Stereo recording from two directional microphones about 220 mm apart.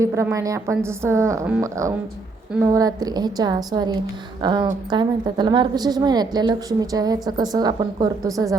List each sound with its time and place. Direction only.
0.0 s a woman's voice: 15° right (ahead or behind)